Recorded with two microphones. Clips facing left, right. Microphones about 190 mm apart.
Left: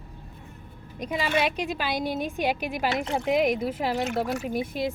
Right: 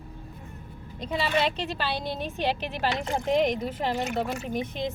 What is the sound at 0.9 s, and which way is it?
A woman's voice, 10° left (ahead or behind).